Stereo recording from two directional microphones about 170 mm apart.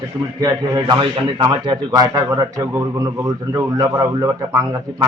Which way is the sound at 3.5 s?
20° right (ahead or behind).